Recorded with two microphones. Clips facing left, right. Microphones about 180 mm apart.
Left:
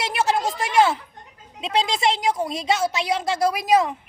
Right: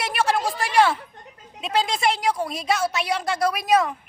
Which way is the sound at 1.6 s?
25° left (ahead or behind).